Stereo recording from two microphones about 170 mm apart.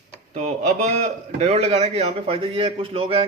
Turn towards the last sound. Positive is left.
turn(degrees=-35)  # may be behind; listen again after turning